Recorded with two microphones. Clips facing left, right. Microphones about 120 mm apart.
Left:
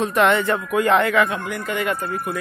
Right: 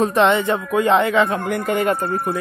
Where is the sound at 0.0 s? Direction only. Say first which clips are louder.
Right 2 dB; 30° right (ahead or behind).